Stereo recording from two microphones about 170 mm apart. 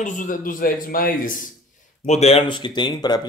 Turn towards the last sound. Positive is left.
turn(degrees=25)  # may be behind; listen again after turning